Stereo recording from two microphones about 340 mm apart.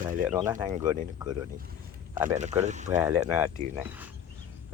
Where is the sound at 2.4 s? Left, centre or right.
Centre.